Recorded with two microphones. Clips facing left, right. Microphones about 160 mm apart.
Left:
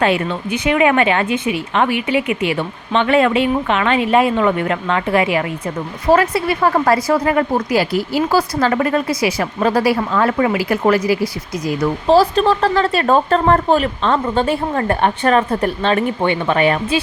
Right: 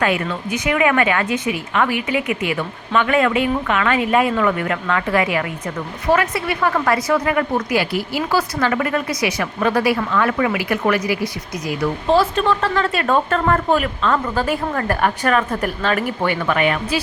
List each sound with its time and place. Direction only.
0.0 s speech: 25° left (ahead or behind)